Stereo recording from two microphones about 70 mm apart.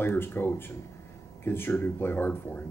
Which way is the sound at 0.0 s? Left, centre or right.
Left.